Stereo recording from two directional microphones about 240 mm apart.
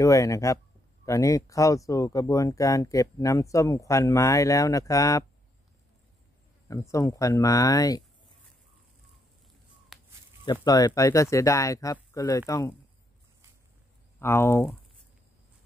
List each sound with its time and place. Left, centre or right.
0.0 s speech: centre
6.7 s speech: centre
9.9 s a sound: centre
10.4 s speech: centre
14.2 s speech: centre